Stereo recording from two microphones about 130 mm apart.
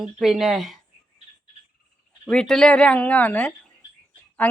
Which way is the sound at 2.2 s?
5° left (ahead or behind).